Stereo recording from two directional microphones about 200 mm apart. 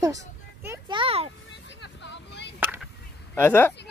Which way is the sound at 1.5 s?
60° left (ahead or behind).